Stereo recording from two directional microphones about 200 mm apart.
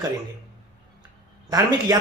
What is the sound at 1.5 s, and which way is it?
Speech, 20° right (ahead or behind).